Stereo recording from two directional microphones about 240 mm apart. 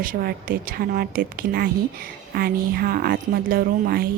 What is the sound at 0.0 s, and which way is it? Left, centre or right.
A woman's voice, right.